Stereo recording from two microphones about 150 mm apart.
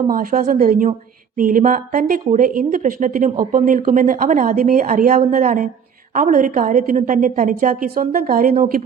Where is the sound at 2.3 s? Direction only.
60° right (ahead or behind).